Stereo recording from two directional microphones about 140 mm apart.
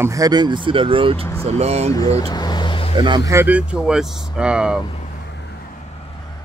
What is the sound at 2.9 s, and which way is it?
Speech, 35° right (ahead or behind).